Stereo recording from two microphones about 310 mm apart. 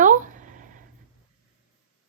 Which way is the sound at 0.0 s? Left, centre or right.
Right.